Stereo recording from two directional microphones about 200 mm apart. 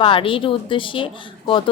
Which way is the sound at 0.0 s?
25° left (ahead or behind).